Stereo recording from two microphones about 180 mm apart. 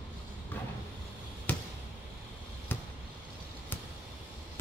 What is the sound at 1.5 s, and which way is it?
Basketball bounce, 10° left (ahead or behind).